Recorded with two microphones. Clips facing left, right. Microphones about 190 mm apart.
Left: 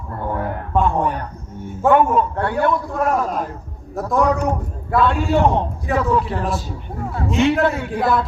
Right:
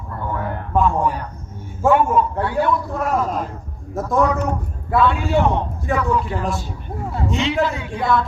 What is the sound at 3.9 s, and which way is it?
Speech, centre (ahead or behind).